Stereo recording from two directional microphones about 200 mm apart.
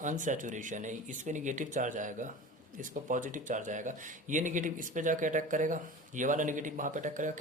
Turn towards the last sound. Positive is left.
turn(degrees=-40)  # may be behind; listen again after turning